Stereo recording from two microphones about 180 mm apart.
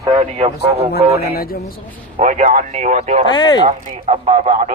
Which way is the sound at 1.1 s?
60° left (ahead or behind).